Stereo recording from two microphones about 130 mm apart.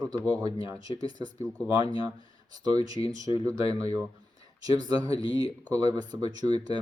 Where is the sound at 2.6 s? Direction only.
30° right (ahead or behind).